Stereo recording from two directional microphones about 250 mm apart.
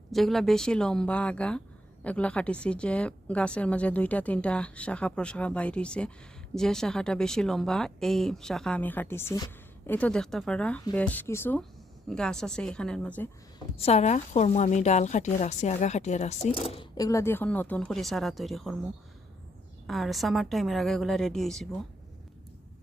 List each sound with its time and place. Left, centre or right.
0.1 s speech: centre
13.7 s a woman's voice: left; by 18.8 s centre
19.9 s speech: centre